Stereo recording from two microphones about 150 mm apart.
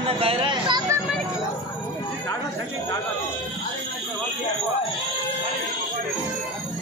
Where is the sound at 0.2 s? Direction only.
35° right (ahead or behind).